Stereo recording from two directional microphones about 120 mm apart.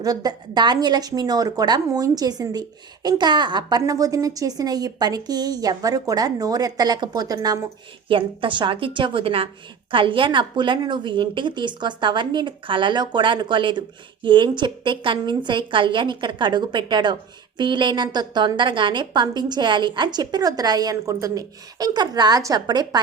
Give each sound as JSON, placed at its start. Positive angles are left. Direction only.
{"t": 0.0, "sound": "a woman's voice", "side_deg": -30}
{"t": 8.0, "sound": "a woman's voice", "side_deg": -45}